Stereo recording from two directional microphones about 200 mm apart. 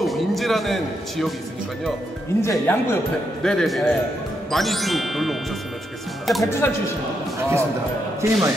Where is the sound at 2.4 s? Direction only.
15° left (ahead or behind).